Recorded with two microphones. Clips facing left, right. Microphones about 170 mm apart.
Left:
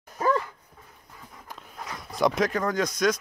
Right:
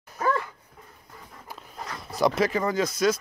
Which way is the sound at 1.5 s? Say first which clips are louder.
Right 1 dB; centre (ahead or behind).